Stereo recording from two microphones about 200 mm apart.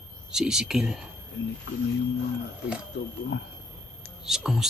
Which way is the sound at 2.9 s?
60° left (ahead or behind).